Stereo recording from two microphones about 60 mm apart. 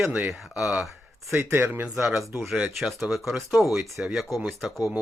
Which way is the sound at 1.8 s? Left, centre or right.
Centre.